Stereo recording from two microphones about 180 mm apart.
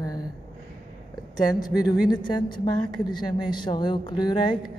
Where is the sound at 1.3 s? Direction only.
20° left (ahead or behind).